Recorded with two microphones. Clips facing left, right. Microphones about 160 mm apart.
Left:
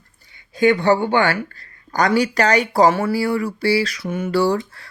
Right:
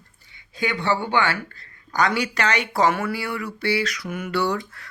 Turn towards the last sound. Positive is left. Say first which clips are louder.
# left 6 dB
turn(degrees=35)  # may be behind; listen again after turning